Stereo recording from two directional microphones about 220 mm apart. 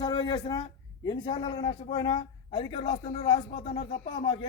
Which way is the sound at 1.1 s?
20° left (ahead or behind).